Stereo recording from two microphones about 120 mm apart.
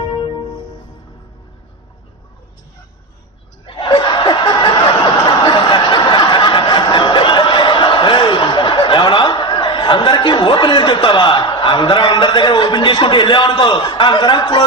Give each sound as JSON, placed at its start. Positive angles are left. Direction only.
{"t": 0.1, "sound": "music", "side_deg": 35}
{"t": 3.7, "sound": "snicker", "side_deg": 45}